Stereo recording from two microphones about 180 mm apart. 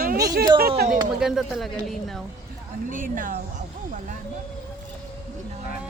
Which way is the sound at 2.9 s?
50° right (ahead or behind).